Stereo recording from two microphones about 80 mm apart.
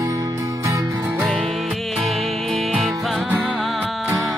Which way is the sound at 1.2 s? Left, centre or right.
Centre.